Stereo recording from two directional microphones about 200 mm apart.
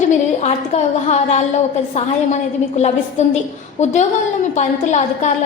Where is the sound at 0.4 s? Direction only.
35° left (ahead or behind).